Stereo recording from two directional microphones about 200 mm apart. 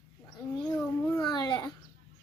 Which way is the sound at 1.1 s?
20° left (ahead or behind).